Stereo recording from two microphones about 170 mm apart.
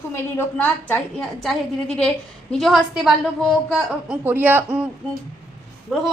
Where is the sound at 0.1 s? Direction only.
15° left (ahead or behind); by 4.9 s 10° right (ahead or behind).